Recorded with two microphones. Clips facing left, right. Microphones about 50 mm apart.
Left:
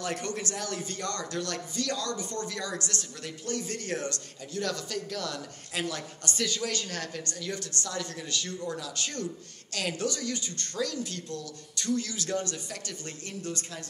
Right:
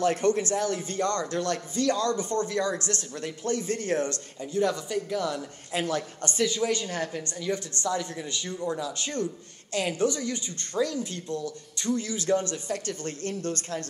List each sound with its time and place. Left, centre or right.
0.0 s speech: right